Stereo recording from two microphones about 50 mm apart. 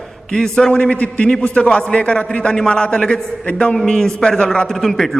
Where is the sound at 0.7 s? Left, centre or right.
Left.